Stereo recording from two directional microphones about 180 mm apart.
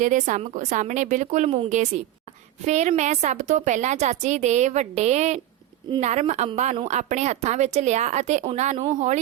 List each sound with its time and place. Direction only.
0.0 s a woman's voice: 45° right (ahead or behind)